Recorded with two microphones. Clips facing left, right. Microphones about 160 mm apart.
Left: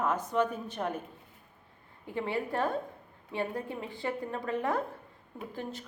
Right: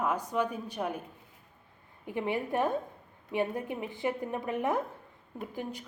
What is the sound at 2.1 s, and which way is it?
A woman's voice, 15° right (ahead or behind).